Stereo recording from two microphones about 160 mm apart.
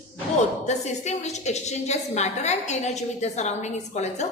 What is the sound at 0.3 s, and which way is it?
A woman's voice, 45° left (ahead or behind).